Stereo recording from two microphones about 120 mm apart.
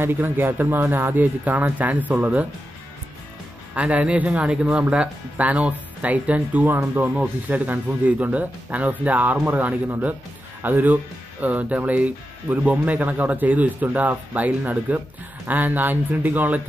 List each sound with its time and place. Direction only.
0.0 s speech: 20° right (ahead or behind)
3.7 s speech: 10° right (ahead or behind)